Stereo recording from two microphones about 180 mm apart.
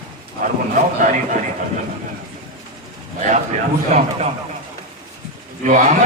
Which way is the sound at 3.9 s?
40° right (ahead or behind).